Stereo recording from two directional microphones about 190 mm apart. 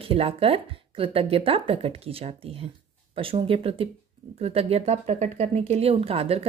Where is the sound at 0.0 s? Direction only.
30° right (ahead or behind).